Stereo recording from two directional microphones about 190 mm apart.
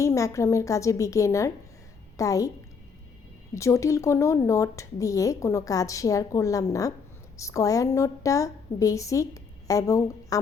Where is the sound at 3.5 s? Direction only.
15° left (ahead or behind).